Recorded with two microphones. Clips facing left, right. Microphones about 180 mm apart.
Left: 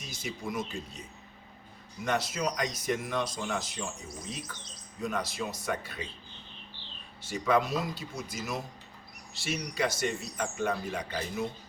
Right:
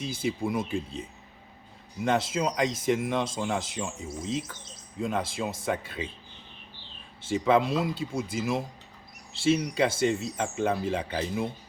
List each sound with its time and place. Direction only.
0.0 s speech: 30° right (ahead or behind)
2.0 s speech: 25° right (ahead or behind)
7.3 s speech: 25° right (ahead or behind)